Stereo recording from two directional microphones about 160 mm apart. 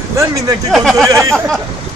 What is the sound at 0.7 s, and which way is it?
Speech, centre (ahead or behind).